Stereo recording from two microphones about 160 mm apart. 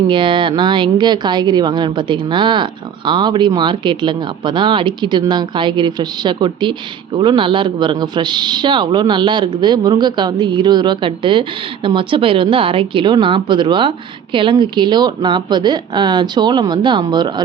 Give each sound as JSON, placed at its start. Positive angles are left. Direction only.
{"t": 0.1, "sound": "a man's voice", "side_deg": -30}